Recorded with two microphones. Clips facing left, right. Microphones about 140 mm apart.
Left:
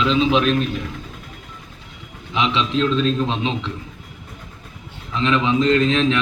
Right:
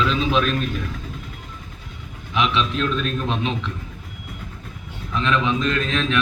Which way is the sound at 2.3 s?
20° left (ahead or behind).